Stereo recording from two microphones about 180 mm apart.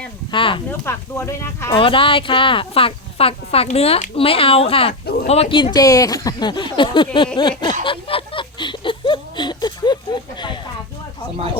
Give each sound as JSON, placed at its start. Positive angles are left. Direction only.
{"t": 0.3, "sound": "speech", "side_deg": 30}
{"t": 0.7, "sound": "speech", "side_deg": 15}
{"t": 1.8, "sound": "speech", "side_deg": 30}
{"t": 7.6, "sound": "a sound", "side_deg": 25}